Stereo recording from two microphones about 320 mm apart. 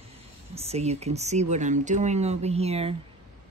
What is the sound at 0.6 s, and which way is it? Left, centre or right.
Speech, centre.